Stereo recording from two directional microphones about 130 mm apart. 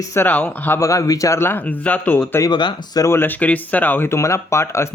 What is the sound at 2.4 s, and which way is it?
Speech, 35° left (ahead or behind).